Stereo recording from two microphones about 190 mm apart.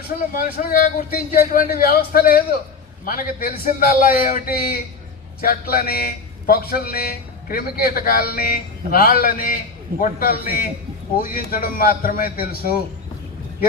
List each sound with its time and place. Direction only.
0.3 s a man's voice: 50° left (ahead or behind)